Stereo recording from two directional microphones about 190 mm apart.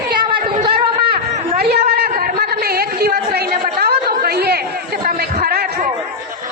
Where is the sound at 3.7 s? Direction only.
55° right (ahead or behind).